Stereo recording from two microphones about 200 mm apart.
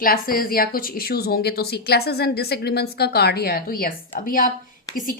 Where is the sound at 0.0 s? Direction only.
45° left (ahead or behind).